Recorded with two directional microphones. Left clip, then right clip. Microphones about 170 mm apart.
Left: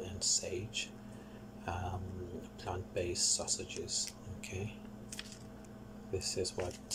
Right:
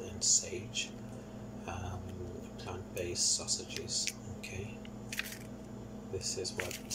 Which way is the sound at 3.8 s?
35° left (ahead or behind).